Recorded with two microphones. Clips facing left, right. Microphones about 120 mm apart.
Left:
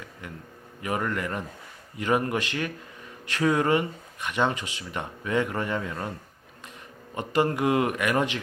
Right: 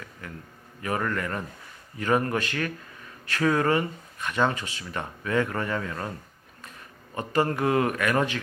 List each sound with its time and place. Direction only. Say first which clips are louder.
0.2 s a man's voice: even; 20° left (ahead or behind)
7.2 s speech: left 1 dB; 15° left (ahead or behind)